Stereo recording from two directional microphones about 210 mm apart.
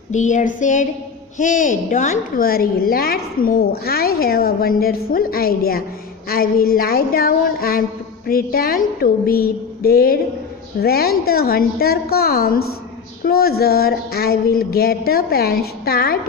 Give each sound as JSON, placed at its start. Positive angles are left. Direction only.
{"t": 0.1, "sound": "a woman's voice", "side_deg": 35}